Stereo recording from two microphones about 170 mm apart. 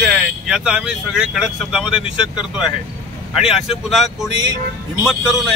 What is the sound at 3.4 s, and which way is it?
Speech, centre (ahead or behind).